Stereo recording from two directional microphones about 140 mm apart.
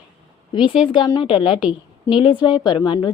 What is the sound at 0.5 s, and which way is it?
A woman's voice, 35° left (ahead or behind).